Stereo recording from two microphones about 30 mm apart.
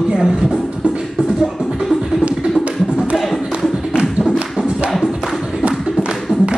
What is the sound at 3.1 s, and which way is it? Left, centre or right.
Music, centre.